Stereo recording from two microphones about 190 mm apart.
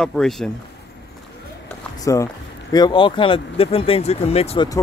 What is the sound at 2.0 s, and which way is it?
Speech, 15° left (ahead or behind).